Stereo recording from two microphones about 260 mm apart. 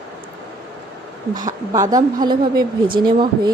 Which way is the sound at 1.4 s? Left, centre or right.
Centre.